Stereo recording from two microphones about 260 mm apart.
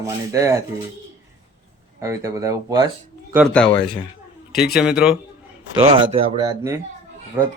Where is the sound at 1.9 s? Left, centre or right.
Centre.